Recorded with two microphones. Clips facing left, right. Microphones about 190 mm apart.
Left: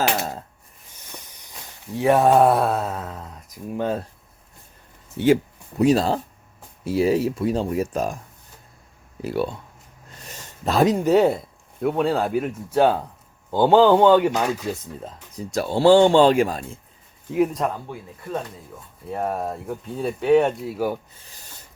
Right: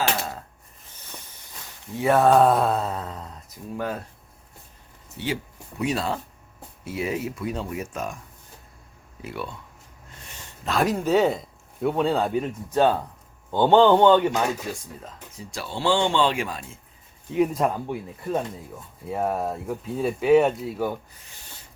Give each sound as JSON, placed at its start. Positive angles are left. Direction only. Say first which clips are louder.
{"t": 2.0, "sound": "speech", "louder": "left 2 dB", "side_deg": 15}
{"t": 3.8, "sound": "speech", "louder": "left 5 dB", "side_deg": 25}
{"t": 5.2, "sound": "speech", "louder": "left 12 dB", "side_deg": 55}
{"t": 5.8, "sound": "speech", "louder": "left 8 dB", "side_deg": 35}
{"t": 9.2, "sound": "speech", "louder": "left 9 dB", "side_deg": 35}
{"t": 10.2, "sound": "a sound", "louder": "left 5 dB", "side_deg": 40}
{"t": 10.8, "sound": "speech", "louder": "left 4 dB", "side_deg": 15}
{"t": 15.0, "sound": "speech", "louder": "left 6 dB", "side_deg": 40}
{"t": 17.3, "sound": "speech", "louder": "left 1 dB", "side_deg": 0}
{"t": 19.0, "sound": "speech", "louder": "even", "side_deg": 0}